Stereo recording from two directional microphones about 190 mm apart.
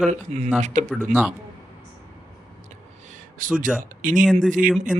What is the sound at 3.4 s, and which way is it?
Speech, 45° right (ahead or behind).